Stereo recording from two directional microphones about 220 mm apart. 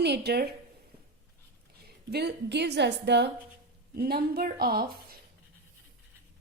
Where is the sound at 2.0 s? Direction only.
50° right (ahead or behind).